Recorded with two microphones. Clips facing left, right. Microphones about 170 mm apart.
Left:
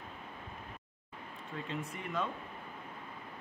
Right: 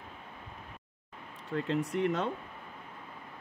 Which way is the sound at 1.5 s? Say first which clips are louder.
Right 10 dB; 70° right (ahead or behind).